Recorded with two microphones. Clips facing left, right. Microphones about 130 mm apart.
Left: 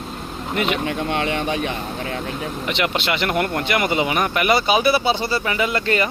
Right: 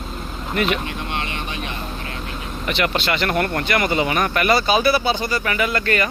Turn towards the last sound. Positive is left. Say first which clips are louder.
# even
turn(degrees=20)  # may be behind; listen again after turning